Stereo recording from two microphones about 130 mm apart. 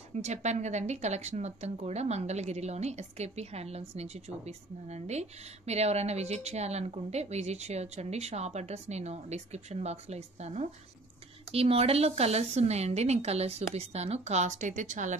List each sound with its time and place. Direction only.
0.1 s a woman's voice: 60° right (ahead or behind)